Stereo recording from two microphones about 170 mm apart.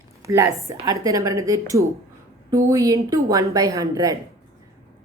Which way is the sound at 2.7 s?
20° right (ahead or behind).